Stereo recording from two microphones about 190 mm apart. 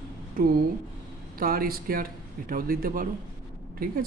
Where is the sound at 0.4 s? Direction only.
50° right (ahead or behind).